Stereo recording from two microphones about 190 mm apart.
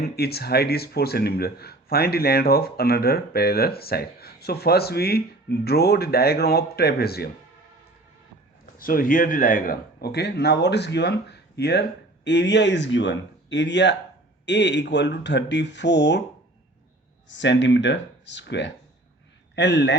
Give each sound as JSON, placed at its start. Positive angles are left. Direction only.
{"t": 0.0, "sound": "speech", "side_deg": 55}
{"t": 8.8, "sound": "speech", "side_deg": 50}
{"t": 17.2, "sound": "speech", "side_deg": 70}